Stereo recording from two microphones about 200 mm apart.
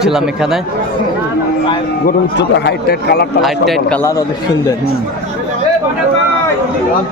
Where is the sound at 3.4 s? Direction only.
Centre (ahead or behind).